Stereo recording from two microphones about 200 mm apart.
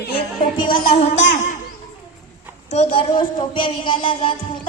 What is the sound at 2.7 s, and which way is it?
A woman's voice, 30° left (ahead or behind).